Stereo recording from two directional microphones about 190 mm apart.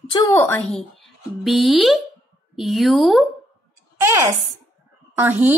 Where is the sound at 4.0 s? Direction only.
15° right (ahead or behind).